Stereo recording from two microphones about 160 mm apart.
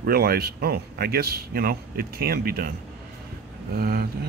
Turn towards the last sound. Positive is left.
turn(degrees=-75)  # may be behind; listen again after turning